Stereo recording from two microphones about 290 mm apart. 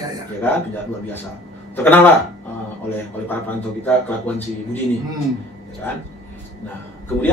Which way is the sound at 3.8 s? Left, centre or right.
Centre.